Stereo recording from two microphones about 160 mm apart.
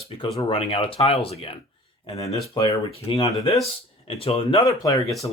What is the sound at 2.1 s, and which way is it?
Speech, 20° left (ahead or behind).